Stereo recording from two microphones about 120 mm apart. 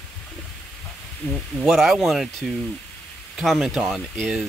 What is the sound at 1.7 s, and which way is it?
Speech, centre (ahead or behind).